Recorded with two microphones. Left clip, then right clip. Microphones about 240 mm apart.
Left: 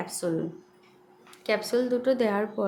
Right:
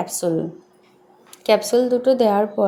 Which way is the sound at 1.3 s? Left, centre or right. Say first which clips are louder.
Right 10 dB; centre.